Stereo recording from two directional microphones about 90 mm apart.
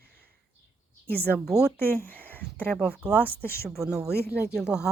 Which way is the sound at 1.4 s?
10° right (ahead or behind).